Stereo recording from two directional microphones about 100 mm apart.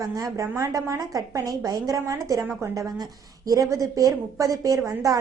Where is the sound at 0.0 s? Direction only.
35° right (ahead or behind).